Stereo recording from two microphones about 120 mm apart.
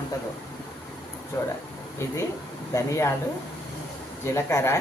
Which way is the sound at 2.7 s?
25° left (ahead or behind).